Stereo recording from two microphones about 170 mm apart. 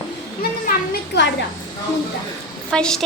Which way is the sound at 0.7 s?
90° left.